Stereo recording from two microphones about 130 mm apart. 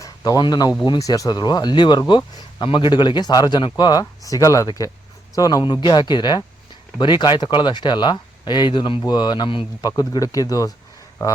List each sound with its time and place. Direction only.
0.0 s speech: 30° left (ahead or behind)